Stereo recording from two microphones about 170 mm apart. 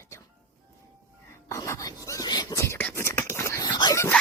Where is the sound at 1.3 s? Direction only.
15° left (ahead or behind).